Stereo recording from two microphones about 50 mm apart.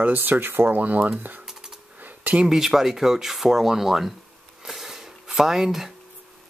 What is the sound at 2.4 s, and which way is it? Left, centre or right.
Speech, centre.